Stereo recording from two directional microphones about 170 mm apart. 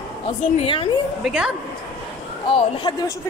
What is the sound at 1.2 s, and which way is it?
Speech, 5° right (ahead or behind).